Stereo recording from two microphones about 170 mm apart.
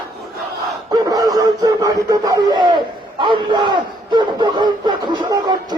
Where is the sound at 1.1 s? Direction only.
20° right (ahead or behind).